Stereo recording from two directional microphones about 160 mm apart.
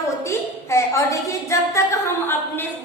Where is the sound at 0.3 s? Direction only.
20° left (ahead or behind).